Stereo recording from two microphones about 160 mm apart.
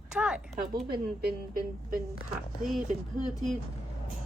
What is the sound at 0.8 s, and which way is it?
Speech, 70° right (ahead or behind).